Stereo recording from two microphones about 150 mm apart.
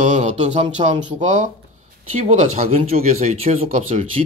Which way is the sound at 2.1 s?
40° right (ahead or behind).